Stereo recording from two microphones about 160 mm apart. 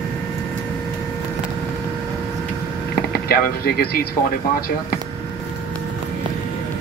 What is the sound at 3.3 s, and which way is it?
Speech, 70° left (ahead or behind).